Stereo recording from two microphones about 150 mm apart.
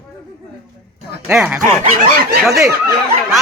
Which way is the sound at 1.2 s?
10° right (ahead or behind).